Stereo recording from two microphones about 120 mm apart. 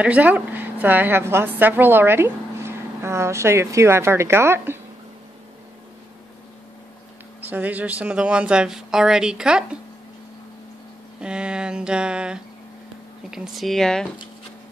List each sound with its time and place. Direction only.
0.0 s a woman's voice: 10° right (ahead or behind)
7.4 s speech: 15° right (ahead or behind)
11.1 s speech: 10° right (ahead or behind)